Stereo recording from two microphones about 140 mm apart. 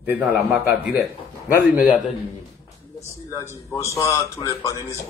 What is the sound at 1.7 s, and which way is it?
Speech, 10° right (ahead or behind).